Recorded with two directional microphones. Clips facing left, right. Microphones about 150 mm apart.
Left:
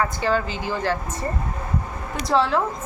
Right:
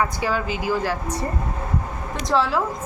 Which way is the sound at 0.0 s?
10° right (ahead or behind).